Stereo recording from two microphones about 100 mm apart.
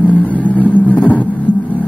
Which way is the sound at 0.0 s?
15° left (ahead or behind).